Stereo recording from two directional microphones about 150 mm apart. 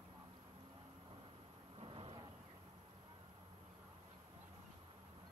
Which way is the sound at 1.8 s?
40° right (ahead or behind).